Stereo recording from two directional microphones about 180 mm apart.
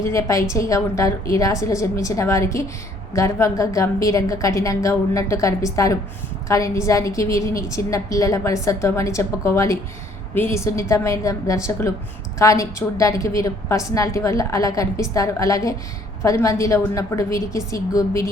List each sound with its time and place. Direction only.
0.0 s a woman's voice: 15° left (ahead or behind)